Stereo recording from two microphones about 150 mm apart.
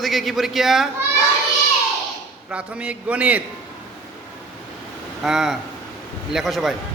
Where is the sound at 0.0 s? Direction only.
Centre (ahead or behind).